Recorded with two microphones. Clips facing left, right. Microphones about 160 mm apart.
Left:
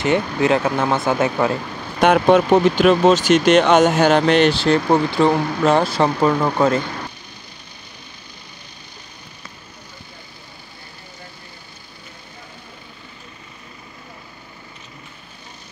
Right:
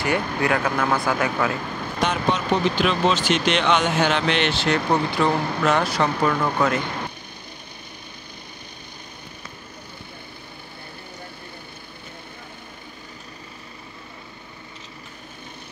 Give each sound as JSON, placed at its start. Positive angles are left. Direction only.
{"t": 0.0, "sound": "speech", "side_deg": 25}
{"t": 2.0, "sound": "speech", "side_deg": 55}